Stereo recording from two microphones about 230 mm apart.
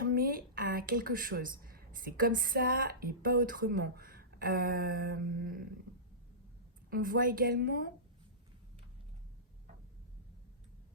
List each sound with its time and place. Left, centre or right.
0.0 s a woman's voice: right
6.9 s a woman's voice: right